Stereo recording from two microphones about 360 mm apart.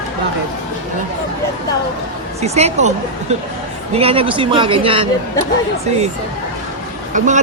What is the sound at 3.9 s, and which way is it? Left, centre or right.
A woman's voice, centre.